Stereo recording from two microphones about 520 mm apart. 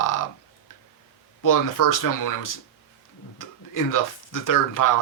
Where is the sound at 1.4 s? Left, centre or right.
Left.